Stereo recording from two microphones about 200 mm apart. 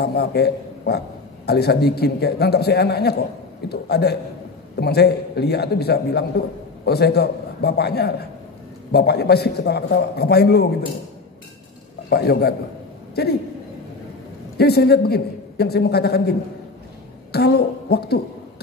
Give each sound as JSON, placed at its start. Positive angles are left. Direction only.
{"t": 0.0, "sound": "a man's voice", "side_deg": 55}
{"t": 12.1, "sound": "a man's voice", "side_deg": 50}
{"t": 14.6, "sound": "a man's voice", "side_deg": 50}